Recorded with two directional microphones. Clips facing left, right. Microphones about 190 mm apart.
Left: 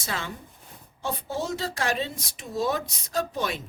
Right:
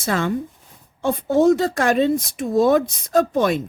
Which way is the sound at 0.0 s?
55° right (ahead or behind).